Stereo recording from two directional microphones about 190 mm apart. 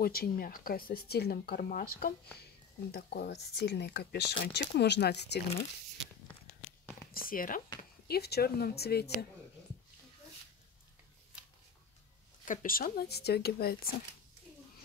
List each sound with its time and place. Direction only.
0.0 s speech: 50° left (ahead or behind)
7.1 s speech: 50° left (ahead or behind)
12.4 s speech: 50° left (ahead or behind)